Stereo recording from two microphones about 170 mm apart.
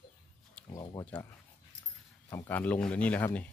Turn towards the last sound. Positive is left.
turn(degrees=10)  # may be behind; listen again after turning